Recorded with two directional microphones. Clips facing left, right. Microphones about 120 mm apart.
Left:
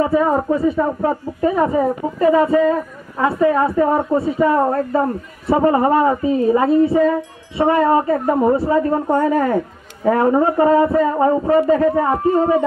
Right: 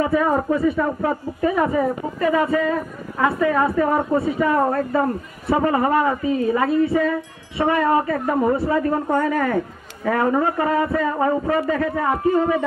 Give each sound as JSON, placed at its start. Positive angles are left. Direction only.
{"t": 0.0, "sound": "speech", "side_deg": 25}